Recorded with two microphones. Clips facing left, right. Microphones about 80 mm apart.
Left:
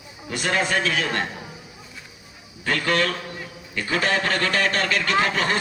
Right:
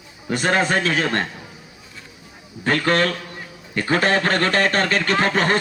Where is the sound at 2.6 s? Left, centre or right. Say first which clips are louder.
Right 4 dB; right.